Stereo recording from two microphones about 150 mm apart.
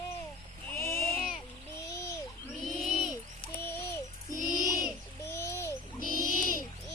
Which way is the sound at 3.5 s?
15° left (ahead or behind).